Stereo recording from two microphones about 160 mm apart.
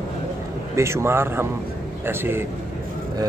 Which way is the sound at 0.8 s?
15° right (ahead or behind).